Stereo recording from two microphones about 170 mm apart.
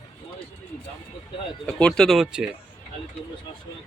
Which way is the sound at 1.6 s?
5° left (ahead or behind).